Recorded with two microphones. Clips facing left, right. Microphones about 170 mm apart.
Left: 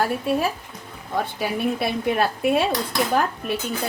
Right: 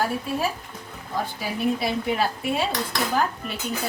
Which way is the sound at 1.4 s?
60° left (ahead or behind).